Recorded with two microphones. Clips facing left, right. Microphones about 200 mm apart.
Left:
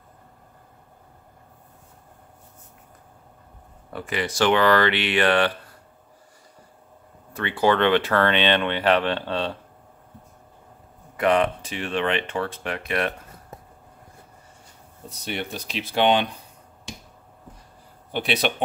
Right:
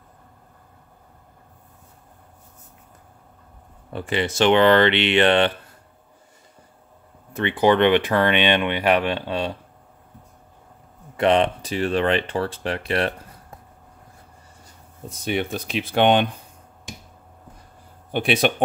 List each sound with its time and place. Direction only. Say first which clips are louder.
3.9 s speech: right 4 dB; 25° right (ahead or behind)
7.3 s speech: right 3 dB; 20° right (ahead or behind)
11.1 s speech: right 2 dB; 30° right (ahead or behind)
15.0 s speech: right 6 dB; 50° right (ahead or behind)
18.1 s speech: right 4 dB; 50° right (ahead or behind)